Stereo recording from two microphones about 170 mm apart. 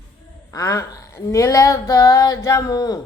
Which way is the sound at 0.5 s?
20° left (ahead or behind).